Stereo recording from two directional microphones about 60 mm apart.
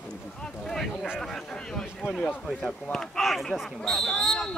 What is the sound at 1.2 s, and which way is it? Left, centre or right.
Speech, centre.